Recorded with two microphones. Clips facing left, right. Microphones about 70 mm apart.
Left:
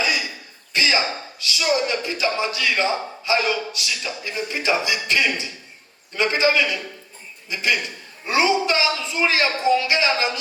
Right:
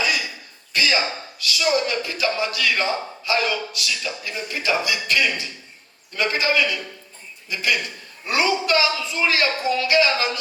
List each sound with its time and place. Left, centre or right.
0.0 s cough: left
0.7 s speech: left